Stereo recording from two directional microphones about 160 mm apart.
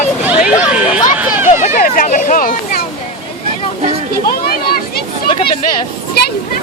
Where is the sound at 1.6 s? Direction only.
60° left (ahead or behind).